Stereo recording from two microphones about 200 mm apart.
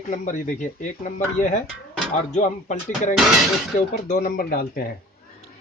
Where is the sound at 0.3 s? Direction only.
40° left (ahead or behind).